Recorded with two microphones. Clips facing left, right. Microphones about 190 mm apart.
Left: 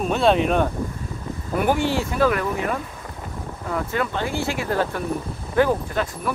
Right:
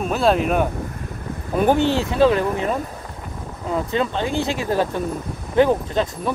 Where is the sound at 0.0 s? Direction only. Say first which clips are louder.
Even; centre (ahead or behind).